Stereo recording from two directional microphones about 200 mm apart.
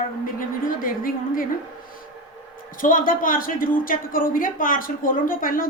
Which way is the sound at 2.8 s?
45° left (ahead or behind).